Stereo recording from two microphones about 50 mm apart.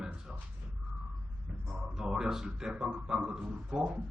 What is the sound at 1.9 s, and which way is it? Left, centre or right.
A man's voice, centre.